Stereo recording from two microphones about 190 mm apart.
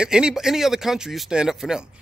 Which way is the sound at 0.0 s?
5° right (ahead or behind).